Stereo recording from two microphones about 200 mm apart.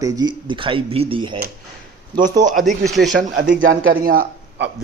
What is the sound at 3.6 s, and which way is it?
Speech, 45° right (ahead or behind).